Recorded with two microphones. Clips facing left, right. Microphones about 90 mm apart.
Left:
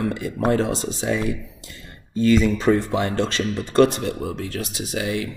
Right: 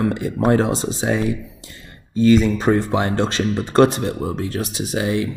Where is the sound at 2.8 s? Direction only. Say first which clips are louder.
Right 3 dB; 30° right (ahead or behind).